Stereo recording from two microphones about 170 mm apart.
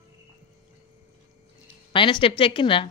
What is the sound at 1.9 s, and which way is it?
Speech, 30° left (ahead or behind).